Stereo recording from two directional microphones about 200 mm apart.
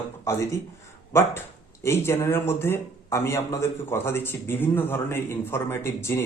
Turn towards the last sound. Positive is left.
turn(degrees=10)  # may be behind; listen again after turning